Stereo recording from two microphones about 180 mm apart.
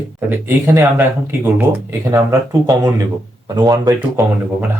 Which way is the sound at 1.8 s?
15° right (ahead or behind).